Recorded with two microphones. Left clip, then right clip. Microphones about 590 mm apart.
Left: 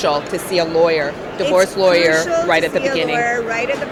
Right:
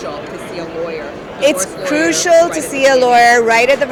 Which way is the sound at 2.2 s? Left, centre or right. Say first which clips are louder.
Right 5 dB; right.